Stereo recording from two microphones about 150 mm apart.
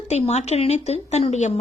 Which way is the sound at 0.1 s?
50° left (ahead or behind).